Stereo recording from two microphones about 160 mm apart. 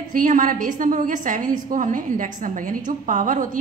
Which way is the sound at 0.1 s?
55° right (ahead or behind).